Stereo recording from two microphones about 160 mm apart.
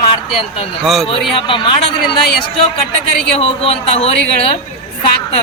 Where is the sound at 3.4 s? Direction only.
35° left (ahead or behind).